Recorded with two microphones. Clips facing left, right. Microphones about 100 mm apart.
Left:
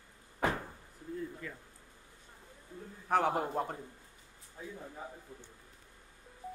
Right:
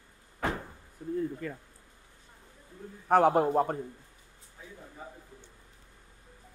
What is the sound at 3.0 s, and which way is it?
Speech, 45° right (ahead or behind).